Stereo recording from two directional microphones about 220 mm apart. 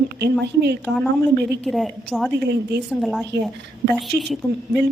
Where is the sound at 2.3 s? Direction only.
50° right (ahead or behind).